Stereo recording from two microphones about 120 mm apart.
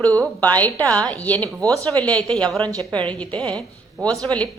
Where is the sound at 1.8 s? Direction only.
10° left (ahead or behind).